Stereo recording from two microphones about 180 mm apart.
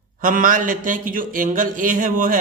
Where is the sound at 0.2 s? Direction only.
50° right (ahead or behind).